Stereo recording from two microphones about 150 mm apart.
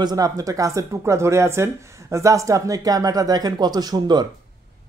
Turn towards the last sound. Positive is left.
turn(degrees=-30)  # may be behind; listen again after turning